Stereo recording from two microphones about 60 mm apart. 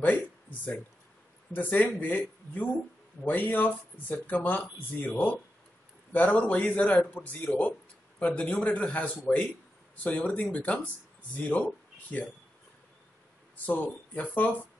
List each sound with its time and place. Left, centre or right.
0.0 s speech: left
13.7 s speech: left